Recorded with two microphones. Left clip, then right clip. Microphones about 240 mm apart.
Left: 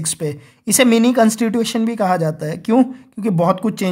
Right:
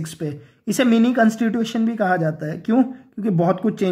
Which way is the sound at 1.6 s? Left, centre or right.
Left.